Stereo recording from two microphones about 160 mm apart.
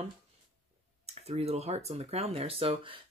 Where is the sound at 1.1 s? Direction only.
40° right (ahead or behind).